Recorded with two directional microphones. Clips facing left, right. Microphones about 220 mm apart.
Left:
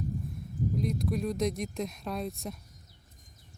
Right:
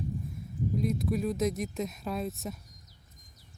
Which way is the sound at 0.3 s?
Centre (ahead or behind).